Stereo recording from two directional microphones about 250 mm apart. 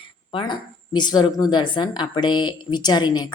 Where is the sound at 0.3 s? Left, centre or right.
Centre.